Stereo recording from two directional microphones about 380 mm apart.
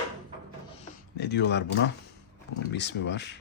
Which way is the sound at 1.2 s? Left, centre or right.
Left.